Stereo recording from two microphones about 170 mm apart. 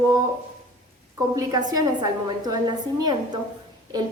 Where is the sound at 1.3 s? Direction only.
20° right (ahead or behind).